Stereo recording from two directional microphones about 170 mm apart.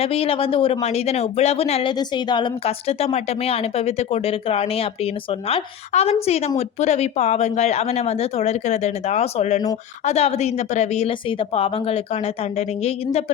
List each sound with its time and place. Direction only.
0.0 s speech: 35° left (ahead or behind)